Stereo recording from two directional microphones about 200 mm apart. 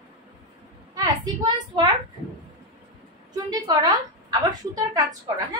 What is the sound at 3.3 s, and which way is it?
A woman's voice, 20° right (ahead or behind).